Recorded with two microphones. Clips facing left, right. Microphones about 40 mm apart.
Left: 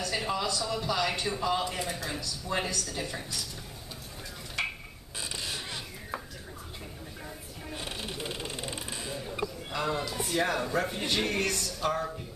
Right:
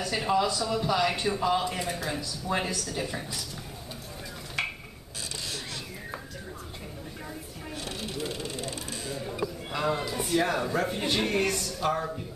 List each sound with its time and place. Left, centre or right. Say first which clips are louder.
0.0 s a man's voice: right 5 dB; centre
4.6 s a sound: right 1 dB; centre
7.7 s music: right 1 dB; centre
9.7 s a man's voice: right 3 dB; centre